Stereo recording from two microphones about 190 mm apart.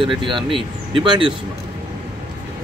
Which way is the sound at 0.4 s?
Centre (ahead or behind).